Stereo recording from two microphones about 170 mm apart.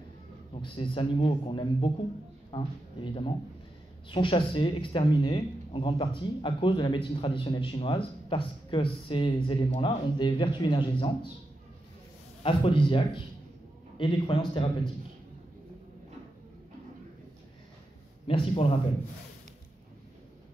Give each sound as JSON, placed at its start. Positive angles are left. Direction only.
{"t": 0.6, "sound": "a man's voice", "side_deg": 30}
{"t": 12.4, "sound": "a man's voice", "side_deg": 30}
{"t": 18.2, "sound": "a man's voice", "side_deg": 35}